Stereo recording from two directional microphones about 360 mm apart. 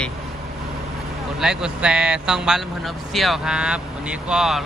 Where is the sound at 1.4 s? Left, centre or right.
Centre.